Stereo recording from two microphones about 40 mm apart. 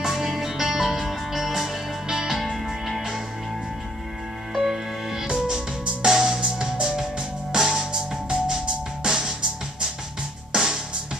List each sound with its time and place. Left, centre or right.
0.0 s music: centre
4.6 s music: centre
5.3 s music: centre
10.5 s music: centre